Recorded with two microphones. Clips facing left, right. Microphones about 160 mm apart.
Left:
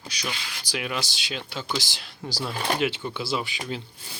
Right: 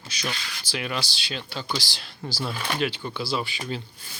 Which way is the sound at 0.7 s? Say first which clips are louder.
Even; 10° left (ahead or behind).